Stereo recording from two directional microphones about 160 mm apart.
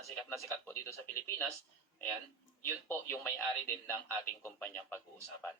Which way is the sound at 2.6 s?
15° left (ahead or behind).